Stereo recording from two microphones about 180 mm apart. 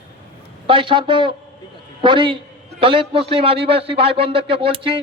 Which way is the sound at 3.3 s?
30° right (ahead or behind).